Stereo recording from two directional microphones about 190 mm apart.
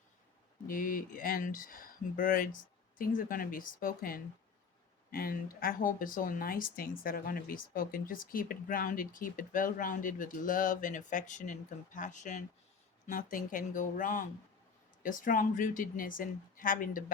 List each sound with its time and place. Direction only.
0.7 s speech: 45° left (ahead or behind)